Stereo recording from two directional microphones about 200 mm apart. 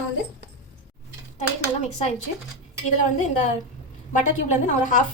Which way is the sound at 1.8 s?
35° left (ahead or behind).